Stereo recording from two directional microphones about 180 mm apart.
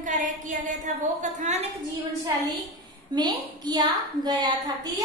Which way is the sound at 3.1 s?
25° right (ahead or behind).